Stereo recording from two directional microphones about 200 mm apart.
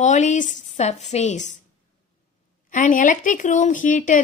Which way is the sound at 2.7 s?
40° left (ahead or behind).